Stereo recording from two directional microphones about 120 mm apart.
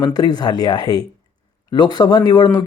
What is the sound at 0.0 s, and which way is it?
Speech, 35° left (ahead or behind).